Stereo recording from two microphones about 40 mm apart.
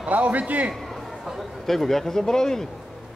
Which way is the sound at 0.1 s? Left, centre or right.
Right.